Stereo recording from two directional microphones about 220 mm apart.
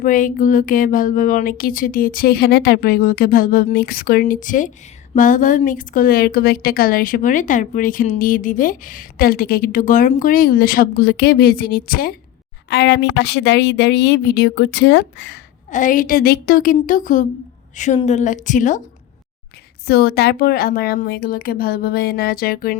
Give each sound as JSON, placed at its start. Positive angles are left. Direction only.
{"t": 0.0, "sound": "a woman's voice", "side_deg": 35}
{"t": 15.7, "sound": "a woman's voice", "side_deg": 35}
{"t": 19.9, "sound": "a woman's voice", "side_deg": 45}